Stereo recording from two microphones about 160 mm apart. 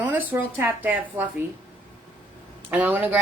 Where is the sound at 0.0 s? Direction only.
10° right (ahead or behind).